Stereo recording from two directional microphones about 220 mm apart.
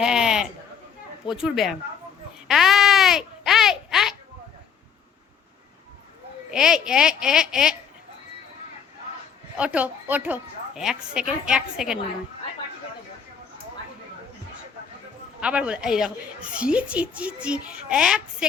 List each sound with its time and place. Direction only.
0.0 s a woman's voice: 5° right (ahead or behind)
2.5 s a sound: centre (ahead or behind)
6.5 s a woman's voice: 5° right (ahead or behind)
9.6 s a woman's voice: 5° right (ahead or behind)
15.4 s a woman's voice: 5° right (ahead or behind)